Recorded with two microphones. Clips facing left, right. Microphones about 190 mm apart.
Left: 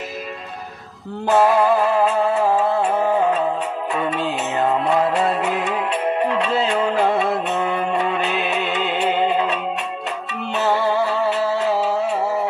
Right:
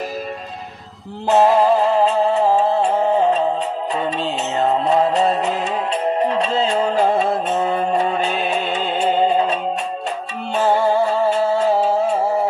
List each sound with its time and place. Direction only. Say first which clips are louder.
1.3 s music: right 2 dB; 25° right (ahead or behind)
10.6 s music: right 3 dB; 30° right (ahead or behind)
11.5 s music: right 3 dB; 45° right (ahead or behind)